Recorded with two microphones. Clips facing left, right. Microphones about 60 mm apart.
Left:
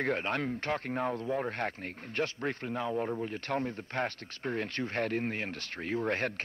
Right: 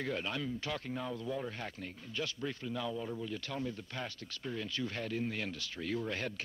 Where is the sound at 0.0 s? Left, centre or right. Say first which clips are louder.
Left 6 dB; left.